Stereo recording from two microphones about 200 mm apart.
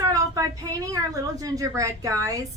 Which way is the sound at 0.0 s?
15° right (ahead or behind).